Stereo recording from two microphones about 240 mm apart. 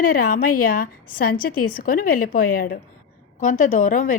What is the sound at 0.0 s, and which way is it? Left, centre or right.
A woman's voice, left.